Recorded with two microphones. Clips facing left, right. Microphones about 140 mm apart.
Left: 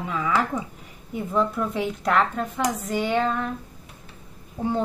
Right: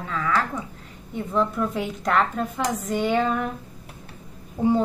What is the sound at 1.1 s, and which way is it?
Speech, 5° left (ahead or behind).